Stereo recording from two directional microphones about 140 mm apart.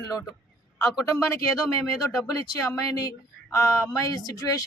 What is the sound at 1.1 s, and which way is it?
Speech, 20° left (ahead or behind).